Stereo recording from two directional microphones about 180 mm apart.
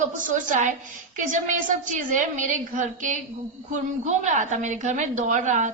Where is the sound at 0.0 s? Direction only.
45° right (ahead or behind).